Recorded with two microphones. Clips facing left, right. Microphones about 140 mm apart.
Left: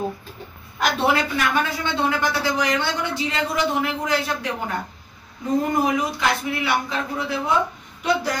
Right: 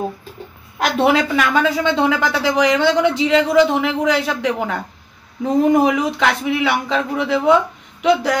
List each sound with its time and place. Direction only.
1.0 s a woman's voice: 90° right
8.0 s speech: 80° right